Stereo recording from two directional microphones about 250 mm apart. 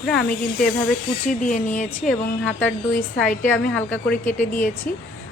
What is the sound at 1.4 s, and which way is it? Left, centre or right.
Speech, left.